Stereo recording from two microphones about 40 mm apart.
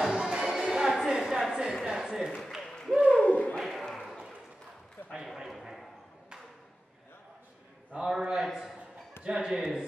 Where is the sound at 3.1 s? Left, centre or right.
Left.